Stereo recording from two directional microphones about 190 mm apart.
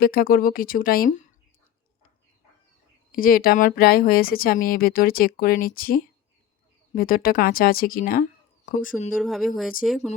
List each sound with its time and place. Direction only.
0.0 s speech: 50° left (ahead or behind)
3.1 s speech: 50° left (ahead or behind)
9.1 s speech: centre (ahead or behind)